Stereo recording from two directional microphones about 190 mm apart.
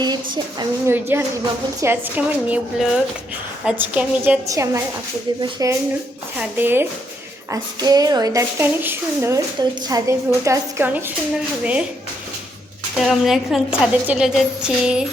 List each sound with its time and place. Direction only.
0.6 s a woman's voice: 10° right (ahead or behind)
13.0 s a woman's voice: centre (ahead or behind)